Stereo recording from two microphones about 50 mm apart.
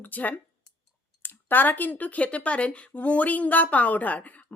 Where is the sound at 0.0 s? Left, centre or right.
Left.